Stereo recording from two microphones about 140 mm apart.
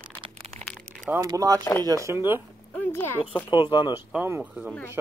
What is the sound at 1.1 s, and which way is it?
Speech, 25° right (ahead or behind).